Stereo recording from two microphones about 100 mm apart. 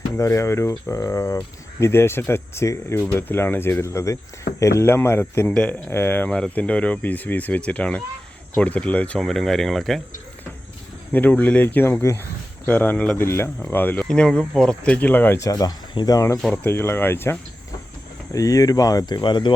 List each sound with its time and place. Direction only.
0.2 s speech: 30° left (ahead or behind); by 10.0 s centre (ahead or behind)
11.1 s speech: 20° left (ahead or behind)
15.4 s speech: 35° left (ahead or behind)
18.3 s speech: 35° left (ahead or behind); by 19.5 s 50° left (ahead or behind)